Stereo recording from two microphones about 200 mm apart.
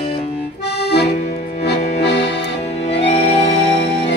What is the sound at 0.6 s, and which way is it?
Accordion, 55° left (ahead or behind).